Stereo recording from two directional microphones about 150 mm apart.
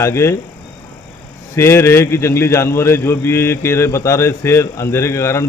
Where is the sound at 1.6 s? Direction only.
15° left (ahead or behind).